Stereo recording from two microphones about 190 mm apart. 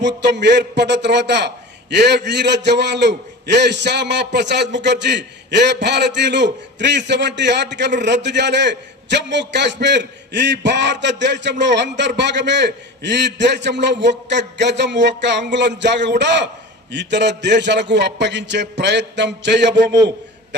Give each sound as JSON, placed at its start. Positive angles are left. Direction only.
{"t": 0.0, "sound": "a man's voice", "side_deg": -65}